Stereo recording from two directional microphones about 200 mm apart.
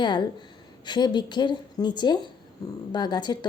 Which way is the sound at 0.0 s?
20° left (ahead or behind).